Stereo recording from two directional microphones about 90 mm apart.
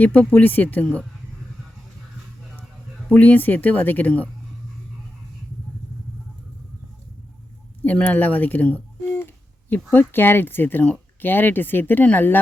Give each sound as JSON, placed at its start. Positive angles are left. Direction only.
{"t": 0.0, "sound": "speech", "side_deg": 15}
{"t": 3.1, "sound": "speech", "side_deg": 20}
{"t": 7.8, "sound": "a sound", "side_deg": 20}
{"t": 9.9, "sound": "speech", "side_deg": 25}